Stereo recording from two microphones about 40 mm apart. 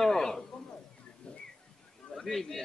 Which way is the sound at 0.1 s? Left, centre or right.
Centre.